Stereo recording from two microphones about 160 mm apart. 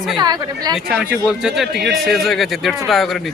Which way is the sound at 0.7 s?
5° right (ahead or behind).